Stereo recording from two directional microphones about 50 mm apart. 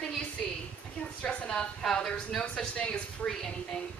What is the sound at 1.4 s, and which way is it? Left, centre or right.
Speech, centre.